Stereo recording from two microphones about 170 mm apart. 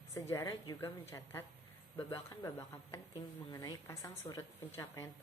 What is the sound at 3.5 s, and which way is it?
A woman's voice, 20° left (ahead or behind).